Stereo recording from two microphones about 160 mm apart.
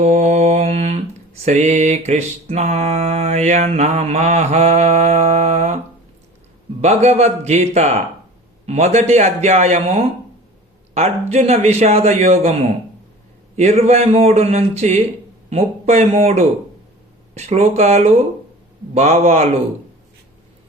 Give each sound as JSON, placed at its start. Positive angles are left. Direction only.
{"t": 0.0, "sound": "mantra", "side_deg": -45}
{"t": 6.8, "sound": "mantra", "side_deg": -45}
{"t": 10.9, "sound": "a man's voice", "side_deg": -40}
{"t": 13.6, "sound": "a man's voice", "side_deg": -45}
{"t": 15.4, "sound": "mantra", "side_deg": -45}
{"t": 18.9, "sound": "a man's voice", "side_deg": -40}